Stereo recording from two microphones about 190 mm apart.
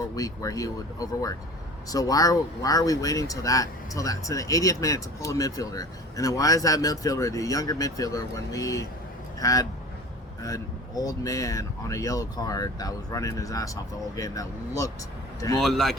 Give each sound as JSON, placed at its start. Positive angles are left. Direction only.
{"t": 0.2, "sound": "speech", "side_deg": 20}
{"t": 15.6, "sound": "speech", "side_deg": 0}